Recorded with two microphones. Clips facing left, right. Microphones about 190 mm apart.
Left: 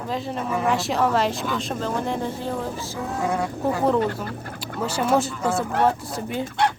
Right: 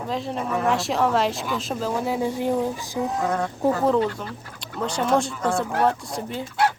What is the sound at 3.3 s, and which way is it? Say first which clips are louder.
Speech: left 1 dB; 10° left (ahead or behind).